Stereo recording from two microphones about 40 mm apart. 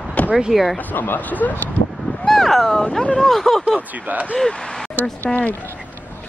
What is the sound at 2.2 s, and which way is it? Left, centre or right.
Speech, centre.